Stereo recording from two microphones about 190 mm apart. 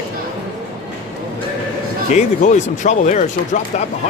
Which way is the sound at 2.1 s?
40° left (ahead or behind).